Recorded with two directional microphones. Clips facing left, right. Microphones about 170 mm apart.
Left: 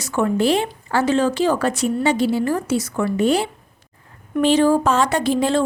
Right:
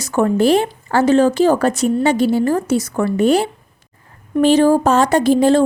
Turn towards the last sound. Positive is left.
turn(degrees=-40)  # may be behind; listen again after turning